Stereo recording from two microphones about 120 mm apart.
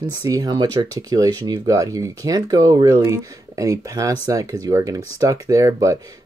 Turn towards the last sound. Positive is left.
turn(degrees=-25)  # may be behind; listen again after turning